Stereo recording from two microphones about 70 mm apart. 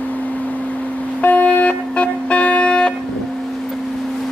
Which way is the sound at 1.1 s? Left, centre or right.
Left.